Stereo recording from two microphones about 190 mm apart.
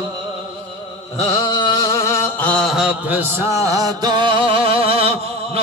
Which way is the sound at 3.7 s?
20° right (ahead or behind).